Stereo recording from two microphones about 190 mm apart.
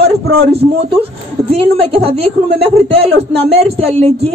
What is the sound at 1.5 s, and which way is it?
Speech, 30° right (ahead or behind).